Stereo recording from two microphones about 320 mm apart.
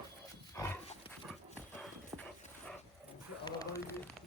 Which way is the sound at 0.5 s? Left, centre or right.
Centre.